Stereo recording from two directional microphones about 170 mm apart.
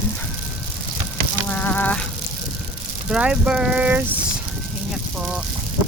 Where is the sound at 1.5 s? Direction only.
10° left (ahead or behind).